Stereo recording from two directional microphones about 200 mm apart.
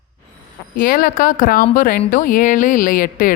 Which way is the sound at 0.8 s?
45° left (ahead or behind).